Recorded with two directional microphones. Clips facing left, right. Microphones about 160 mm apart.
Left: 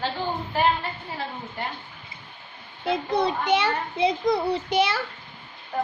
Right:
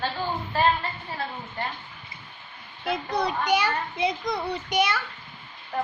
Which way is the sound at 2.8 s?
25° left (ahead or behind).